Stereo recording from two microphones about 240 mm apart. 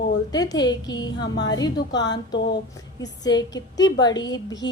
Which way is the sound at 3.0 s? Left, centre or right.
Centre.